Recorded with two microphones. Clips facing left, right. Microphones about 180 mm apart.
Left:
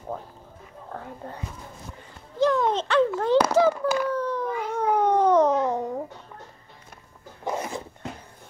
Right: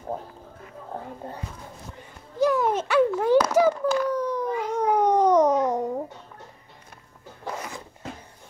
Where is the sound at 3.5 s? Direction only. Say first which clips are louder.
Even; 10° right (ahead or behind).